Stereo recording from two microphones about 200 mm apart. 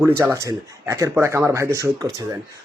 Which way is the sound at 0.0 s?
15° right (ahead or behind).